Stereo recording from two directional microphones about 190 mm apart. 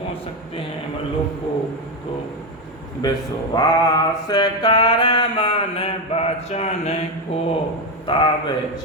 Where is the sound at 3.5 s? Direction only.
20° left (ahead or behind); by 7.0 s 35° left (ahead or behind).